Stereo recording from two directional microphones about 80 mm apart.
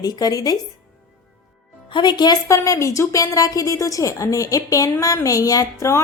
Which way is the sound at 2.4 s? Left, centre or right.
Left.